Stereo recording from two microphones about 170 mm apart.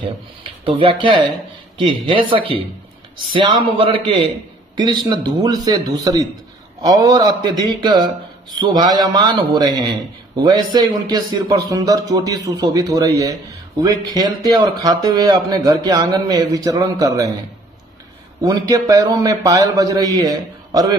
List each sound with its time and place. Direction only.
0.4 s speech: 30° right (ahead or behind)
18.4 s speech: 20° right (ahead or behind)